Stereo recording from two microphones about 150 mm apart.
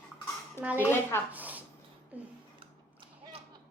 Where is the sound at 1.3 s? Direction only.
10° right (ahead or behind).